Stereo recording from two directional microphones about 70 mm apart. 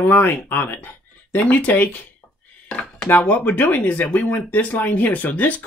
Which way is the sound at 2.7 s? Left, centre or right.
Centre.